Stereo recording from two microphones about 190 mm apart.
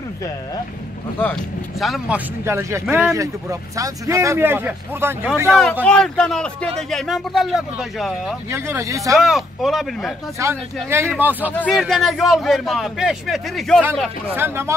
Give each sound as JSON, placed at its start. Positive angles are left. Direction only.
{"t": 1.8, "sound": "speech", "side_deg": -5}
{"t": 5.9, "sound": "a man's voice", "side_deg": 5}
{"t": 8.5, "sound": "speech", "side_deg": -15}
{"t": 9.1, "sound": "a man's voice", "side_deg": 0}
{"t": 10.4, "sound": "speech", "side_deg": -15}
{"t": 11.5, "sound": "a man's voice", "side_deg": 5}
{"t": 14.3, "sound": "speech", "side_deg": -10}